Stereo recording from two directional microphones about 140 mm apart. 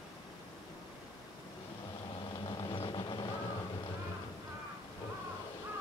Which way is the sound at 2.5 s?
35° left (ahead or behind).